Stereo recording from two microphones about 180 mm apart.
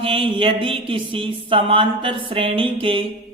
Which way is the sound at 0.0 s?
30° right (ahead or behind).